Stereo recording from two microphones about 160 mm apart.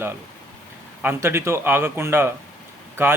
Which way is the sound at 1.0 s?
15° right (ahead or behind).